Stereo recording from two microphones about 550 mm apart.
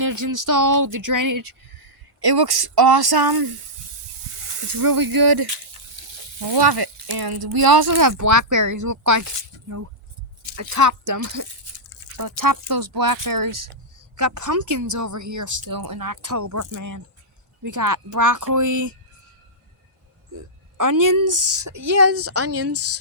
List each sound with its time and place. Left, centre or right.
0.0 s speech: right
4.4 s snake: right
4.7 s sizzle: right
6.0 s sizzle: right
20.7 s a woman's voice: right